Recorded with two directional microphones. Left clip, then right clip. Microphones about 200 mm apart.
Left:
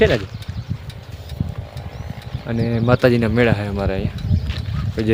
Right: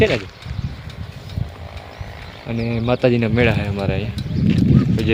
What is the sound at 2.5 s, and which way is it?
Speech, 20° left (ahead or behind).